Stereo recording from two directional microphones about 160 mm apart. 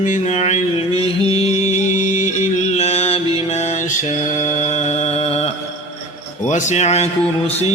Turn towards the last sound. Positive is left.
turn(degrees=45)  # may be behind; listen again after turning